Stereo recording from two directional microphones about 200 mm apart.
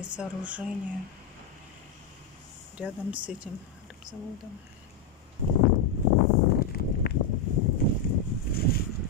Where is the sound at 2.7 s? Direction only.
5° right (ahead or behind).